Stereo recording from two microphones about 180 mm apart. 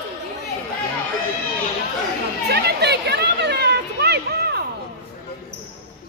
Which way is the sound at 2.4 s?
65° right (ahead or behind).